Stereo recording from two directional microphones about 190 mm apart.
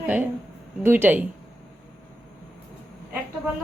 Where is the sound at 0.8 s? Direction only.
10° right (ahead or behind).